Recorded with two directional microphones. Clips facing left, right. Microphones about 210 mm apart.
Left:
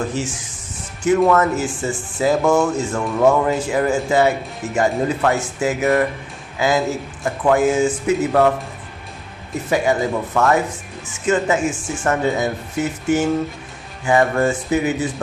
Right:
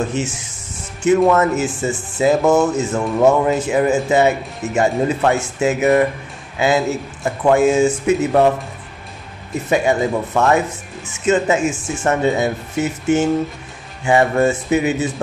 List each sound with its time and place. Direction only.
0.1 s speech: 25° right (ahead or behind)
9.7 s speech: 25° right (ahead or behind)